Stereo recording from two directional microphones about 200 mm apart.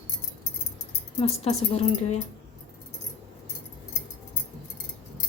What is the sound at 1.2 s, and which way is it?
Speech, 30° left (ahead or behind).